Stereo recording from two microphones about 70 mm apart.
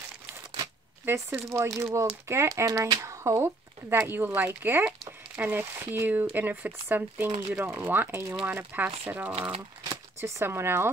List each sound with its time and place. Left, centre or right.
1.0 s speech: right
8.5 s speech: right
10.4 s speech: right